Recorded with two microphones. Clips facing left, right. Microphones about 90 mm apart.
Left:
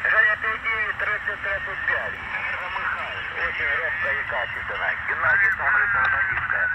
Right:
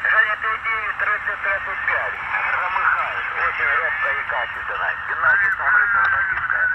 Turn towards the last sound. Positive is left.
turn(degrees=-30)  # may be behind; listen again after turning